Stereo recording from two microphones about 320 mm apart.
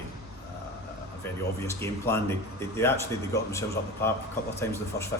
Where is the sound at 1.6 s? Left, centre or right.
Centre.